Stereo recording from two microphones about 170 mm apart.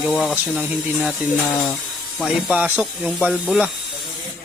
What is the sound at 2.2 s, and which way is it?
Speech, 5° right (ahead or behind).